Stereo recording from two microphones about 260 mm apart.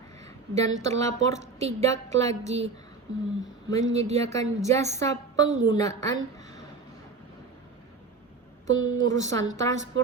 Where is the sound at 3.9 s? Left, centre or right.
Right.